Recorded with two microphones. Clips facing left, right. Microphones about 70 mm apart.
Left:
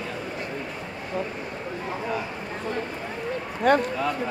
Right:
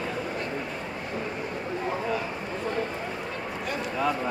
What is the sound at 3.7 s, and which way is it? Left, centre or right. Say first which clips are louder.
Speech: left 15 dB; left.